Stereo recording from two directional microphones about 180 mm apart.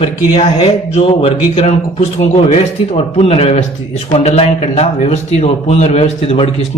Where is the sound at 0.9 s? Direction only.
30° left (ahead or behind).